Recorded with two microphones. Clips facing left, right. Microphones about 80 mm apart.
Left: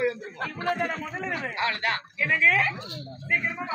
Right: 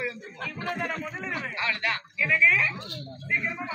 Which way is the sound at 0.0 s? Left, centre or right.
Left.